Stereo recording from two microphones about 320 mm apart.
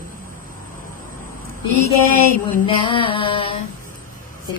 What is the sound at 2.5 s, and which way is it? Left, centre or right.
A woman's voice, centre.